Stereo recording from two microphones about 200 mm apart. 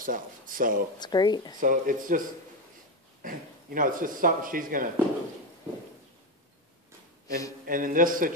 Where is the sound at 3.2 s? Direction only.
45° right (ahead or behind).